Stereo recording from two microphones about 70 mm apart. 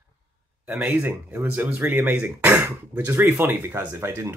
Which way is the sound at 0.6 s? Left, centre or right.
Right.